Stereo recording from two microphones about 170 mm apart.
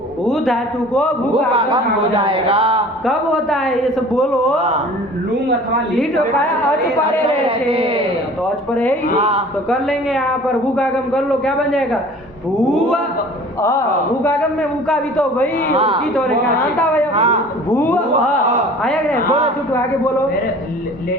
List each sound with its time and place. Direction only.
0.3 s a man's voice: centre (ahead or behind)
1.5 s a man's voice: 30° right (ahead or behind)
3.1 s a man's voice: centre (ahead or behind)
4.5 s a man's voice: 40° right (ahead or behind)
7.3 s a man's voice: 35° right (ahead or behind)
8.7 s a woman's voice: 5° left (ahead or behind)
9.1 s a man's voice: 35° right (ahead or behind)
9.6 s a man's voice: centre (ahead or behind)
13.6 s a woman's voice: 15° left (ahead or behind)
14.8 s a man's voice: 5° left (ahead or behind)
15.7 s a man's voice: 35° right (ahead or behind)
16.7 s a woman's voice: 5° left (ahead or behind)
17.2 s a man's voice: 40° right (ahead or behind)
17.7 s a woman's voice: 10° left (ahead or behind)